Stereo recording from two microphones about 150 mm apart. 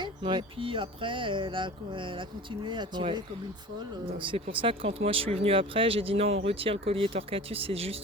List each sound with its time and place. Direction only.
0.0 s speech: 30° right (ahead or behind)
4.2 s speech: 35° right (ahead or behind)